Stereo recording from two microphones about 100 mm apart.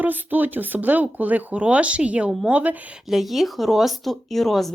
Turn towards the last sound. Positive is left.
turn(degrees=0)  # may be behind; listen again after turning